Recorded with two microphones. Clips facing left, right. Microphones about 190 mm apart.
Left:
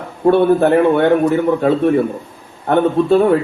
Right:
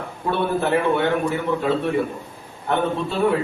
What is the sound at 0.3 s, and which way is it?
Speech, 50° left (ahead or behind).